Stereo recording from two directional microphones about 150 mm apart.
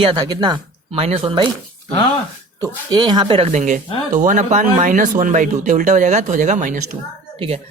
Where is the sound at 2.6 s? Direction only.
25° right (ahead or behind).